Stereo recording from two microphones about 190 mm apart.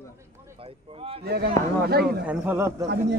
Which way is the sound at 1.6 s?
20° left (ahead or behind).